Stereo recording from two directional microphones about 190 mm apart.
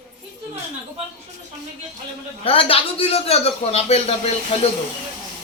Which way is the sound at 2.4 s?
30° left (ahead or behind).